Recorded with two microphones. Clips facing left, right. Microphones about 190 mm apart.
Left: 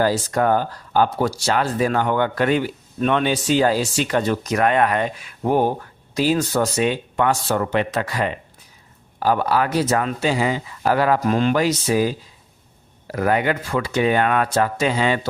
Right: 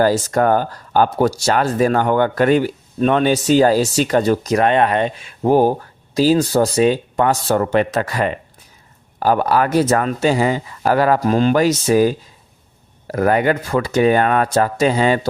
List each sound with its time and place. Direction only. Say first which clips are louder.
0.0 s speech: right 4 dB; 45° right (ahead or behind)